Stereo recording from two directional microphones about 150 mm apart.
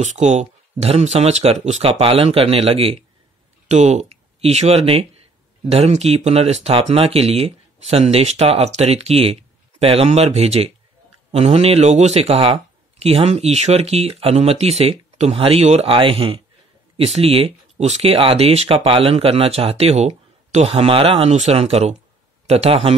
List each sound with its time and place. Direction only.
0.0 s speech: 50° right (ahead or behind)